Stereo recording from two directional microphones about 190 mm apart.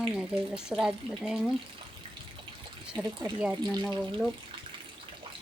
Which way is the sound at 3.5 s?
20° right (ahead or behind).